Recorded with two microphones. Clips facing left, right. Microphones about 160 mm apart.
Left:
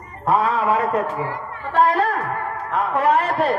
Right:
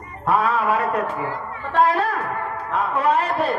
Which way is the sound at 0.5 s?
30° left (ahead or behind).